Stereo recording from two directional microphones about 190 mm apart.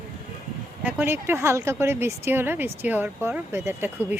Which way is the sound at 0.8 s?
10° right (ahead or behind).